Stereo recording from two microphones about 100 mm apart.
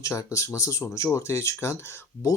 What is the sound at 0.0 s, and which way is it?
Speech, 30° left (ahead or behind).